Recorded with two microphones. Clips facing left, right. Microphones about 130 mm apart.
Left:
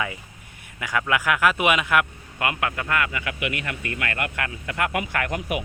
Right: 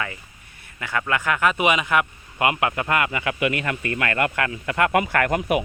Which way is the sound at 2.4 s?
20° right (ahead or behind).